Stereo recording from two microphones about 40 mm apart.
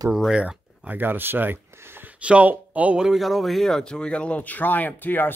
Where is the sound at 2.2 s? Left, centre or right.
Right.